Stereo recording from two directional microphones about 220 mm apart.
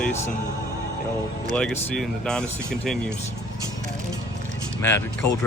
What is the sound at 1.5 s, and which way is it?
Speech, 5° left (ahead or behind).